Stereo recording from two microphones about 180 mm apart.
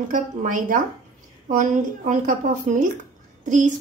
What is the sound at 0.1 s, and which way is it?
A woman's voice, 50° right (ahead or behind).